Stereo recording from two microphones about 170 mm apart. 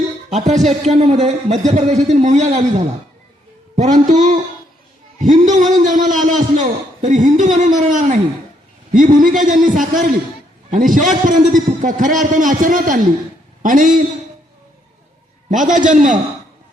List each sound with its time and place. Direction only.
0.4 s a man's voice: 40° right (ahead or behind)
5.5 s a man's voice: 45° right (ahead or behind)
15.4 s a man's voice: 50° right (ahead or behind)